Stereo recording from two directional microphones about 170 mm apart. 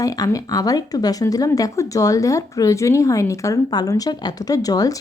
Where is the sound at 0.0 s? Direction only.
20° left (ahead or behind).